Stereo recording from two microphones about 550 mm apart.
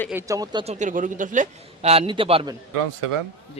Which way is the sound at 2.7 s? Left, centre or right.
Right.